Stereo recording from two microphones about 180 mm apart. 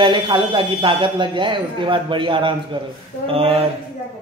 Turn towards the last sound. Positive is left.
turn(degrees=-30)  # may be behind; listen again after turning